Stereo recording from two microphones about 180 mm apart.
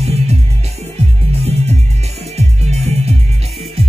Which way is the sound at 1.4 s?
35° right (ahead or behind).